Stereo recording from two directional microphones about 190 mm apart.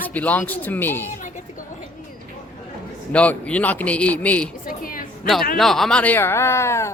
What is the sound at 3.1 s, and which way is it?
Speech, 5° left (ahead or behind).